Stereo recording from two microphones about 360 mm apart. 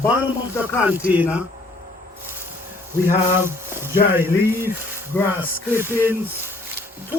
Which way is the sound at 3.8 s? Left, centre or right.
Centre.